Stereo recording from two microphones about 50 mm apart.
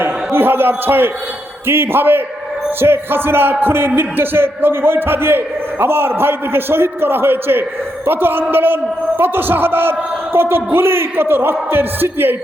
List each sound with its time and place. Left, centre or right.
0.0 s a man's voice: right
1.6 s music: right